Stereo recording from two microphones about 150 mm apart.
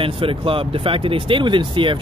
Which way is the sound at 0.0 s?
35° right (ahead or behind).